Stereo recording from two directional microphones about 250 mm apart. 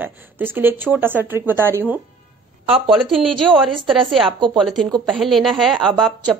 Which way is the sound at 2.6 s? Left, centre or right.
Right.